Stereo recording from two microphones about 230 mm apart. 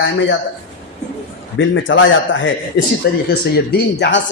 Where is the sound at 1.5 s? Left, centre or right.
Left.